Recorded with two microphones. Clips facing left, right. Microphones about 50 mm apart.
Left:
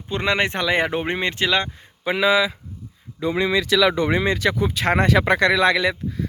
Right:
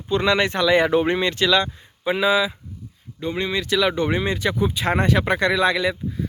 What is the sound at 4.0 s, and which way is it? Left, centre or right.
Speech, left.